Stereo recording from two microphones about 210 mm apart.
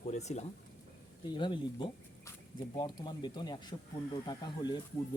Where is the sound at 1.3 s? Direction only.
20° left (ahead or behind).